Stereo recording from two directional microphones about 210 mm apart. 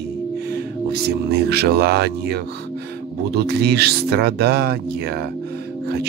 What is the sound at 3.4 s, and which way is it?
Speech, 50° right (ahead or behind).